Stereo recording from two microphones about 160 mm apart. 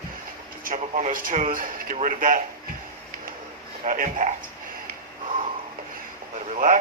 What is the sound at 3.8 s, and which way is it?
Speech, 55° right (ahead or behind).